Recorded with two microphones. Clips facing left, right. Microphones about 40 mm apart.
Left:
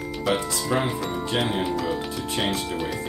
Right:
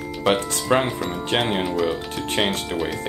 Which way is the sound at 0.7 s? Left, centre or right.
Right.